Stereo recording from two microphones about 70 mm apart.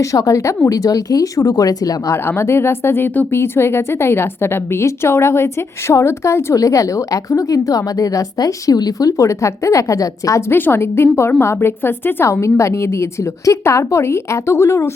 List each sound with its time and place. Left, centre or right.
0.0 s speech: left
2.1 s speech: left
10.5 s a woman's voice: left